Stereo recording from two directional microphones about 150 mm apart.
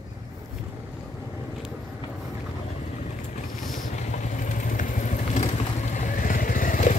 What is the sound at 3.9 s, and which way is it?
Vehicle, 55° left (ahead or behind).